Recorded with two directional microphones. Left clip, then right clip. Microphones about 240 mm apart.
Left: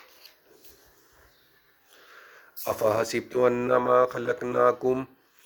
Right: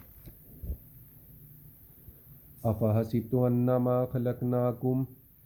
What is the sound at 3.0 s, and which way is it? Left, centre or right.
Speech, left.